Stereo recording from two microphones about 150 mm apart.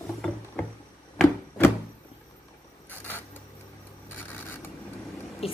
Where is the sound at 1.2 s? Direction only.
10° left (ahead or behind).